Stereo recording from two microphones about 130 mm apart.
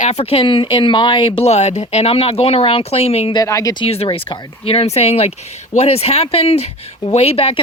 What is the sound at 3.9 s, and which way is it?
A woman's voice, 45° left (ahead or behind).